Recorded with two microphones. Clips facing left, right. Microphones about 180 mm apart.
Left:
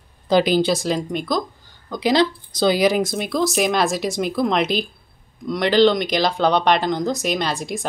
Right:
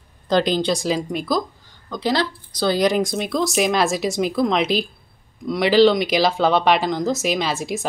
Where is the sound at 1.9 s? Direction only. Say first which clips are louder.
Left 4 dB; 15° left (ahead or behind).